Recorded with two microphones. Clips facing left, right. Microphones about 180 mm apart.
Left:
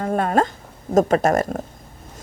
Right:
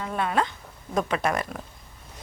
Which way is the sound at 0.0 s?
45° left (ahead or behind).